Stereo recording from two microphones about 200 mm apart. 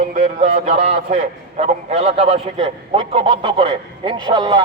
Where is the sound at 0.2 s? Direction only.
35° right (ahead or behind).